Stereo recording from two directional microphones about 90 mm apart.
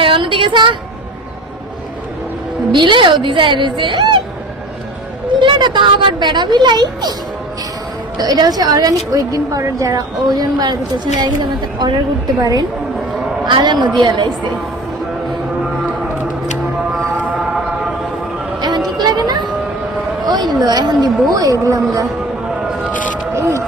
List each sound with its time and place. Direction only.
0.0 s a woman's voice: 70° right (ahead or behind)
2.7 s speech: 60° right (ahead or behind)
5.4 s speech: 60° right (ahead or behind)
8.2 s a woman's voice: 45° right (ahead or behind)
12.4 s a woman's voice: 45° right (ahead or behind)
13.4 s a man's voice: 55° right (ahead or behind)
17.3 s a sound: 5° right (ahead or behind)
18.9 s music: 50° right (ahead or behind)
20.2 s a sound: 50° right (ahead or behind)
20.6 s a woman's voice: 50° right (ahead or behind)
23.3 s vehicle: 30° right (ahead or behind)